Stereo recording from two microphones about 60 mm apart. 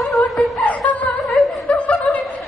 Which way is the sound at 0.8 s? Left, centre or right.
Left.